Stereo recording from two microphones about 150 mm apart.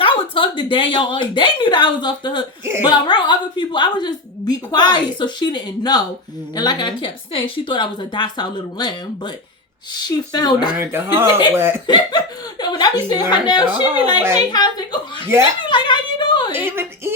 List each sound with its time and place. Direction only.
0.0 s a woman's voice: 35° left (ahead or behind)
2.6 s a woman's voice: 15° right (ahead or behind)
2.9 s a woman's voice: 30° left (ahead or behind)
10.8 s a woman's voice: 15° right (ahead or behind)
11.9 s a woman's voice: 30° left (ahead or behind)
15.7 s a sound: 30° left (ahead or behind)
16.5 s a woman's voice: 15° right (ahead or behind)